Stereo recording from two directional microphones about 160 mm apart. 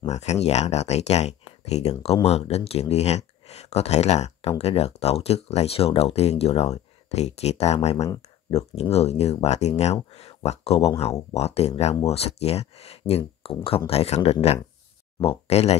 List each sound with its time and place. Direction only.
0.1 s speech: 45° left (ahead or behind)